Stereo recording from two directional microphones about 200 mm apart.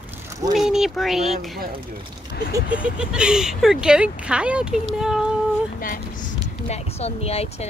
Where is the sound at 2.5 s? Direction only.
5° right (ahead or behind).